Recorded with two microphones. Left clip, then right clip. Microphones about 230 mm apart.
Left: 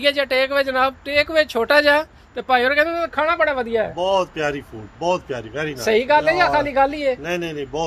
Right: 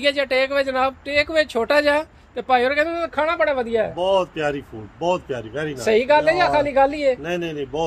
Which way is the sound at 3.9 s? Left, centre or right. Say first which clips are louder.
Even; right.